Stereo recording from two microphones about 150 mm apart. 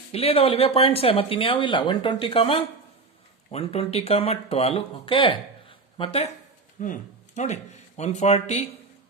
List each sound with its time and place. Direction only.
0.1 s speech: 40° left (ahead or behind)
6.7 s speech: 60° left (ahead or behind)